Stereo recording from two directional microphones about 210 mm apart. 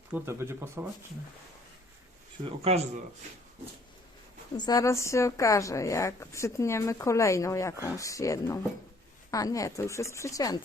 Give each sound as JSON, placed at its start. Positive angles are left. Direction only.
{"t": 0.1, "sound": "speech", "side_deg": -10}
{"t": 2.4, "sound": "a man's voice", "side_deg": -30}
{"t": 4.5, "sound": "a woman's voice", "side_deg": 20}